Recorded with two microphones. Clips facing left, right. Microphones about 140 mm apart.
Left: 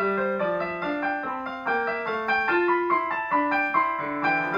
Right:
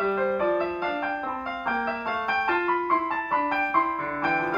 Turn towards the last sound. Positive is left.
turn(degrees=-10)  # may be behind; listen again after turning